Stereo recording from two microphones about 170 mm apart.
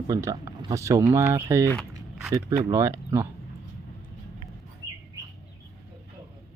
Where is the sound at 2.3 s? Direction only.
25° right (ahead or behind).